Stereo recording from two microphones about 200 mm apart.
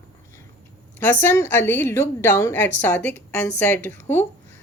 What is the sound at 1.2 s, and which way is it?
A woman's voice, 10° left (ahead or behind).